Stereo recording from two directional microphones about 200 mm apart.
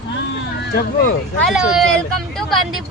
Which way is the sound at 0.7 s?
45° left (ahead or behind).